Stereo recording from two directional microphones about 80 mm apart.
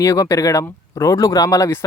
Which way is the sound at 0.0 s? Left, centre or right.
Left.